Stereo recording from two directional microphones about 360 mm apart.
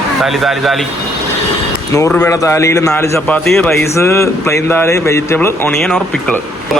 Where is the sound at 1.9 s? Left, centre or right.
Centre.